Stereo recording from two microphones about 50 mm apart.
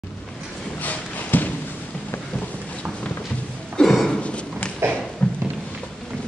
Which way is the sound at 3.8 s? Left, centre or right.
Left.